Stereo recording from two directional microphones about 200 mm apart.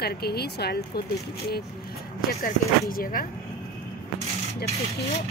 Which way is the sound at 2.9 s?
45° left (ahead or behind).